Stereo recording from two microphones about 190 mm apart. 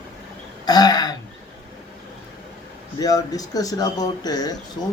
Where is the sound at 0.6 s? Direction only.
20° left (ahead or behind).